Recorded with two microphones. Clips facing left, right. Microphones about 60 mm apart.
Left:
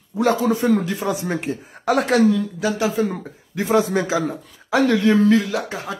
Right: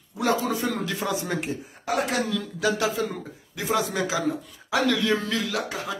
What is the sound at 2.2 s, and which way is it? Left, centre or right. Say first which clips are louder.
A man's voice: left 7 dB; left.